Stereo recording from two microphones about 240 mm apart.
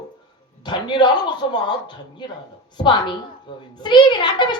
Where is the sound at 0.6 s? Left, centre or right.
Centre.